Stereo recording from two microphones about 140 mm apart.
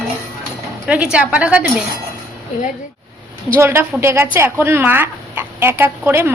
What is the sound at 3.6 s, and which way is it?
A woman's voice, 15° right (ahead or behind).